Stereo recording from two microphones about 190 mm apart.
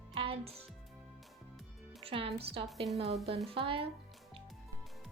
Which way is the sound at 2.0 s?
30° right (ahead or behind).